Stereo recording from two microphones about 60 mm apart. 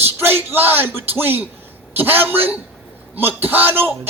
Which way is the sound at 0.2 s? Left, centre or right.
Right.